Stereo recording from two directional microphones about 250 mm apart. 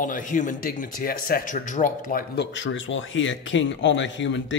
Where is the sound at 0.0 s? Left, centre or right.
Left.